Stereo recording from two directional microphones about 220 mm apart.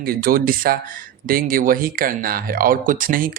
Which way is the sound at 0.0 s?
40° right (ahead or behind).